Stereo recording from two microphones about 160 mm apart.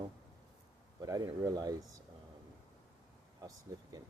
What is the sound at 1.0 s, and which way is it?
Speech, 20° right (ahead or behind).